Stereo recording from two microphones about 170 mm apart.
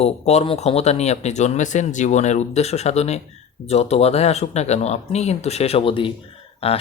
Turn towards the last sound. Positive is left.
turn(degrees=35)  # may be behind; listen again after turning